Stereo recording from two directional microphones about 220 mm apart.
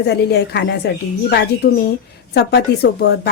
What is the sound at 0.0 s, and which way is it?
A woman's voice, 50° left (ahead or behind).